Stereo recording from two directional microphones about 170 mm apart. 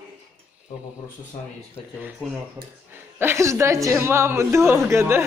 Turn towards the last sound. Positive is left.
turn(degrees=-15)  # may be behind; listen again after turning